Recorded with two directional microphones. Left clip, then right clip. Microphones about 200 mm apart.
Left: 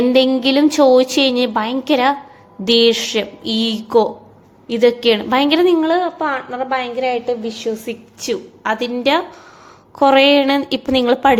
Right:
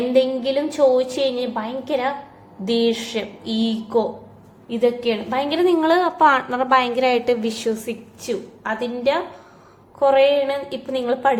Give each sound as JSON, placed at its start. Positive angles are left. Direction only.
{"t": 0.1, "sound": "a woman's voice", "side_deg": 45}
{"t": 2.6, "sound": "a sound", "side_deg": 40}
{"t": 4.7, "sound": "a woman's voice", "side_deg": 55}
{"t": 5.8, "sound": "a woman's voice", "side_deg": 0}
{"t": 8.2, "sound": "a woman's voice", "side_deg": 45}